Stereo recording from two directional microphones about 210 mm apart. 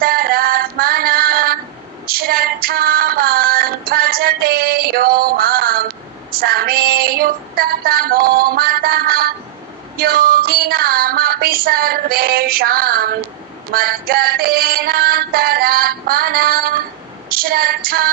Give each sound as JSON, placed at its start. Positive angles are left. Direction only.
{"t": 0.0, "sound": "female singing", "side_deg": -45}